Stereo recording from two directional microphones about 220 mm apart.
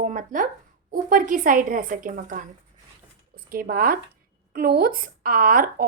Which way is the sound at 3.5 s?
40° right (ahead or behind).